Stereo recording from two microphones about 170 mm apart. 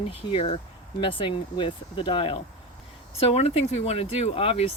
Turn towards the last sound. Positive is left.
turn(degrees=35)  # may be behind; listen again after turning